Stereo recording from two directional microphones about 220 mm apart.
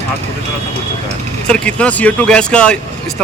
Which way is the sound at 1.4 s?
5° left (ahead or behind).